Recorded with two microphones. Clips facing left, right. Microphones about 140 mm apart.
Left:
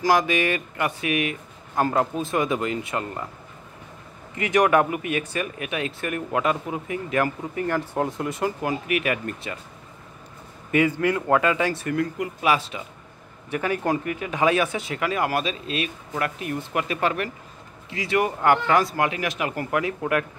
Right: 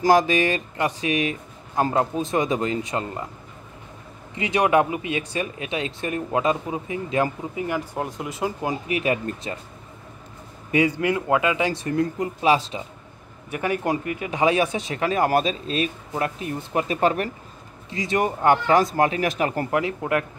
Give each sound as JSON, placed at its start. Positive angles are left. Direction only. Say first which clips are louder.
{"t": 0.0, "sound": "speech", "louder": "right 3 dB", "side_deg": -30}
{"t": 4.4, "sound": "speech", "louder": "even", "side_deg": -15}
{"t": 7.9, "sound": "speech", "louder": "left 3 dB", "side_deg": 0}
{"t": 8.4, "sound": "speech", "louder": "right 2 dB", "side_deg": -20}
{"t": 10.7, "sound": "speech", "louder": "even", "side_deg": -20}
{"t": 11.8, "sound": "speech", "louder": "right 2 dB", "side_deg": -30}
{"t": 13.5, "sound": "speech", "louder": "even", "side_deg": -15}
{"t": 15.0, "sound": "speech", "louder": "right 4 dB", "side_deg": -35}
{"t": 18.9, "sound": "speech", "louder": "right 4 dB", "side_deg": -35}